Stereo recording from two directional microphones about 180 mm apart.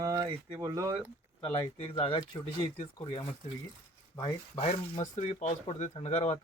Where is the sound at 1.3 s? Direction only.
30° left (ahead or behind).